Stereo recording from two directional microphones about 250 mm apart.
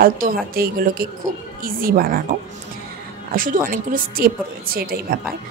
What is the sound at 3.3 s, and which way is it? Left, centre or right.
A woman's voice, right.